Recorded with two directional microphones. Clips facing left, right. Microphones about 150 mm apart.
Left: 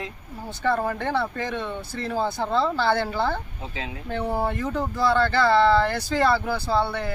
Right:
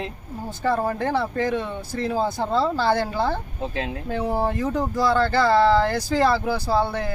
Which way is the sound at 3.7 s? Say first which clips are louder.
Right 4 dB; 55° right (ahead or behind).